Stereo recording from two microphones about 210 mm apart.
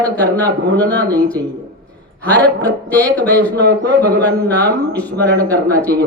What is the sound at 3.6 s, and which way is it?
Speech, 55° right (ahead or behind).